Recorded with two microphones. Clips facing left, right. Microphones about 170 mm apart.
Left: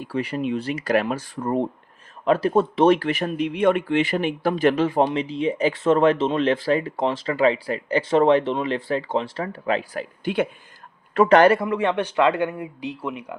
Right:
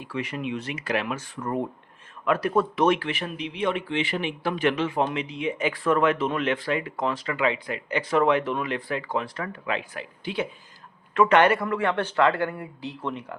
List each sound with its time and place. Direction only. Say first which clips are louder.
0.0 s speech: left 5 dB; 35° left (ahead or behind); by 10.5 s 55° left (ahead or behind)
11.1 s speech: left 4 dB; 35° left (ahead or behind)
11.6 s a man's voice: left 3 dB; 20° left (ahead or behind)